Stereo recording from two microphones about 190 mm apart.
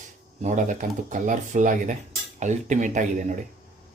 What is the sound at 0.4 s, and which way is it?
Speech, 40° right (ahead or behind).